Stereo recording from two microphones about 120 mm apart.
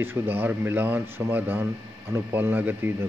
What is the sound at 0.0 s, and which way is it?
Speech, 20° right (ahead or behind).